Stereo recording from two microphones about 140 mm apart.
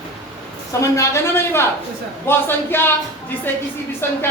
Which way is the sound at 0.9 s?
20° left (ahead or behind).